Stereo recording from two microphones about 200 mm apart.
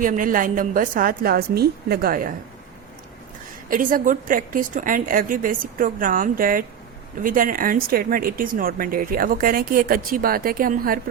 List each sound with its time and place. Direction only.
0.0 s speech: 40° right (ahead or behind)
3.7 s speech: 45° right (ahead or behind)